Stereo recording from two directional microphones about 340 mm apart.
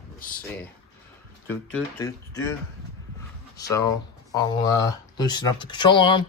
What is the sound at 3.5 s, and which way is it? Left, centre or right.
Speech, centre.